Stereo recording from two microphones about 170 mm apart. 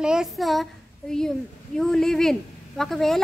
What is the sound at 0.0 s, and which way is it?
Speech, 5° right (ahead or behind).